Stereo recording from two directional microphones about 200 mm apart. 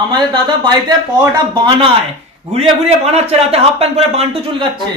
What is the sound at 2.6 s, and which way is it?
Speech, 30° right (ahead or behind).